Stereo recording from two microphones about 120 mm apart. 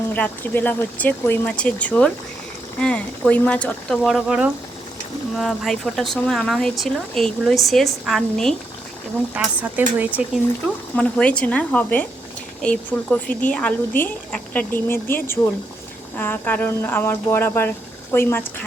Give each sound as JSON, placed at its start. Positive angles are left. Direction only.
{"t": 0.1, "sound": "speech", "side_deg": 15}
{"t": 4.0, "sound": "speech", "side_deg": -5}
{"t": 9.6, "sound": "speech", "side_deg": -15}
{"t": 10.9, "sound": "speech", "side_deg": 10}